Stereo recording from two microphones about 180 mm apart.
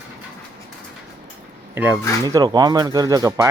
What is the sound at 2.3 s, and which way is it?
Speech, 20° right (ahead or behind).